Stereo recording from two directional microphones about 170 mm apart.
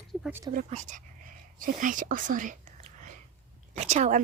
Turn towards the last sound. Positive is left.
turn(degrees=-45)  # may be behind; listen again after turning